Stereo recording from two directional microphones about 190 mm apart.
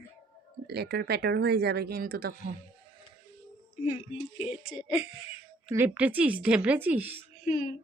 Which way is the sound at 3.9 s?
30° left (ahead or behind).